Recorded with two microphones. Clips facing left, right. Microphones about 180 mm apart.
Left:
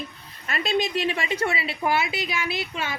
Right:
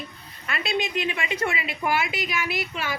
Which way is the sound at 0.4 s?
40° left (ahead or behind).